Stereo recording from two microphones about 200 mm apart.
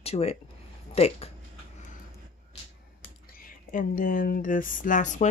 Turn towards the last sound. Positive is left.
turn(degrees=40)  # may be behind; listen again after turning